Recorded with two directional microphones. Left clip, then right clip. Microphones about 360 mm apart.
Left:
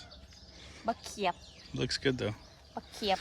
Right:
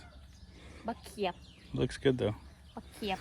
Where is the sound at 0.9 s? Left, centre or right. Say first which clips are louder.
Left 3 dB; left.